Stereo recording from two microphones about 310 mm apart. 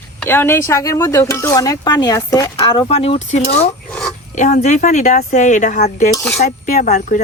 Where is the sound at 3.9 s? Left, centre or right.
Centre.